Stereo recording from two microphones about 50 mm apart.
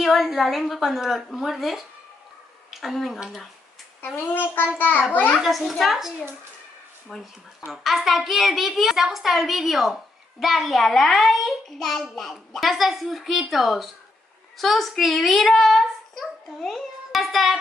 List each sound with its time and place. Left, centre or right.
0.0 s a child's voice: centre
4.3 s a child's voice: left
5.4 s a child's voice: centre
7.6 s a child's voice: centre